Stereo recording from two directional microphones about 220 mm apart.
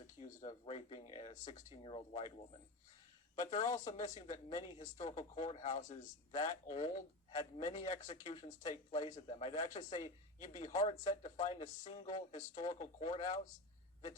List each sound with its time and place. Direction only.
0.2 s speech: 25° left (ahead or behind)
3.6 s speech: 15° left (ahead or behind)
3.9 s speech: 35° left (ahead or behind)